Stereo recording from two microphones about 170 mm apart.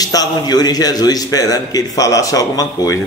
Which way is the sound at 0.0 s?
20° left (ahead or behind).